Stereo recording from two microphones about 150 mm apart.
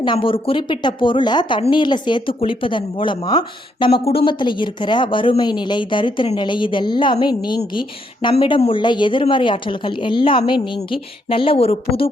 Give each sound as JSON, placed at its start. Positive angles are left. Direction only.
{"t": 0.0, "sound": "speech", "side_deg": 35}